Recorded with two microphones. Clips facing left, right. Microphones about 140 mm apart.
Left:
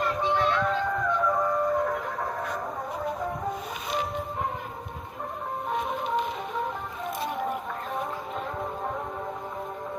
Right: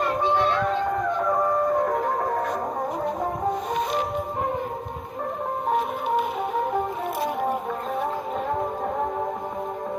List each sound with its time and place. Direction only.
1.5 s music: 40° right (ahead or behind)